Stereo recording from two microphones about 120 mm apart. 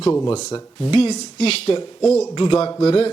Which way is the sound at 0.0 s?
20° left (ahead or behind).